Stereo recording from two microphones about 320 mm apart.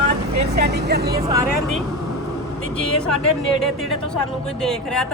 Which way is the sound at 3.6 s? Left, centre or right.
Centre.